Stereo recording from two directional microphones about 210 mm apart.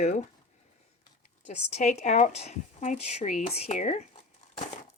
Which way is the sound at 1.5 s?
30° left (ahead or behind).